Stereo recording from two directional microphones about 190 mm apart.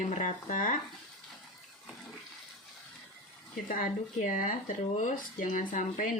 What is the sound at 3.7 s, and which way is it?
Speech, 45° left (ahead or behind).